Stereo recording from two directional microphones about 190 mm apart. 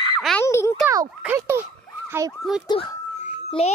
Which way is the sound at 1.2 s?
10° right (ahead or behind).